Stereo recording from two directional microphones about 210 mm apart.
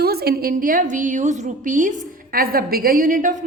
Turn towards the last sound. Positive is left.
turn(degrees=-40)  # may be behind; listen again after turning